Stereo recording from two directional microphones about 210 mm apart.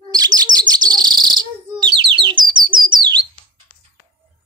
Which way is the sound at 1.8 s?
25° right (ahead or behind).